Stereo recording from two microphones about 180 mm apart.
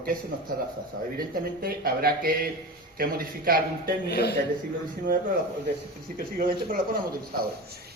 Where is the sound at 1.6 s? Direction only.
55° right (ahead or behind).